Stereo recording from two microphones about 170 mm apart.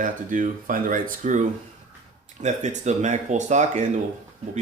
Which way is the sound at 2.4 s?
45° right (ahead or behind).